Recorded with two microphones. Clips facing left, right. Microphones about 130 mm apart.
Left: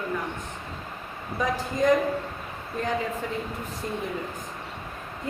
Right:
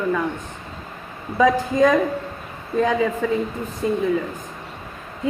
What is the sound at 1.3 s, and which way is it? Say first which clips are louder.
A woman's voice: right 10 dB; 90° right.